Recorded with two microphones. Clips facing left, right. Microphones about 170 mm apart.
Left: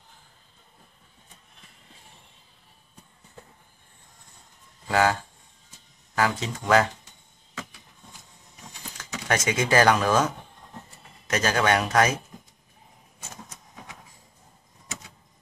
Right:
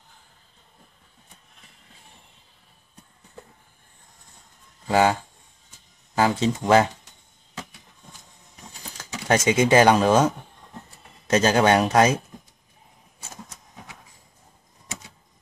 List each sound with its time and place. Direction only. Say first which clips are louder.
4.8 s a sound: right 3 dB; 25° right (ahead or behind)
6.1 s speech: right 5 dB; 25° right (ahead or behind)
8.9 s speech: right 5 dB; 30° right (ahead or behind)